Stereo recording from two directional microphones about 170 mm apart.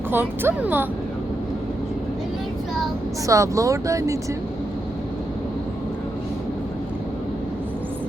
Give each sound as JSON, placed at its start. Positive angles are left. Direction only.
{"t": 0.1, "sound": "speech", "side_deg": -10}
{"t": 3.2, "sound": "speech", "side_deg": -20}